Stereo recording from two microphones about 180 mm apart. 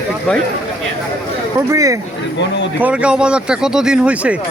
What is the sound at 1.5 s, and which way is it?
Speech, 20° right (ahead or behind).